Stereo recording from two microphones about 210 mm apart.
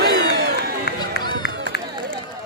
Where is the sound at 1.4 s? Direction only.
50° left (ahead or behind).